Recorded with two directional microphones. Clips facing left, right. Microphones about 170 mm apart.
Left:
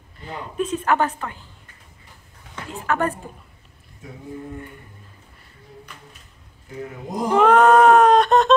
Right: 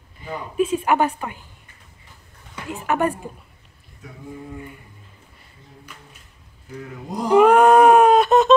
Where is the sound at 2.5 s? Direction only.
15° right (ahead or behind).